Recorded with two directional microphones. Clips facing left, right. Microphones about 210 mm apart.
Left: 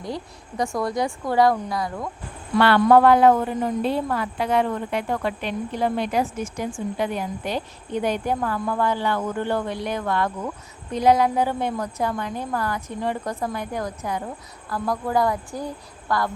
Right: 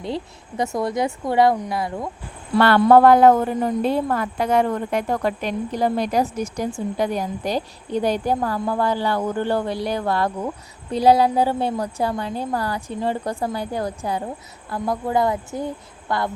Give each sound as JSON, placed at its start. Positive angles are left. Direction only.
{"t": 0.0, "sound": "speech", "side_deg": -25}
{"t": 2.6, "sound": "a woman's voice", "side_deg": -45}